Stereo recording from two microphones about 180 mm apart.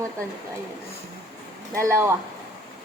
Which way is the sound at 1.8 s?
15° right (ahead or behind).